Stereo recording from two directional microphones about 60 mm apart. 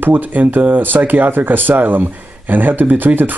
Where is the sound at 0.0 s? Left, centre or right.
Right.